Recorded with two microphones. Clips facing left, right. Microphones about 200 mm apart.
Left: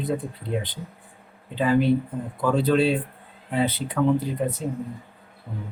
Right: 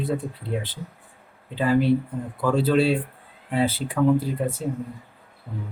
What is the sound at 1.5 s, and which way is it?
A man's voice, 5° right (ahead or behind).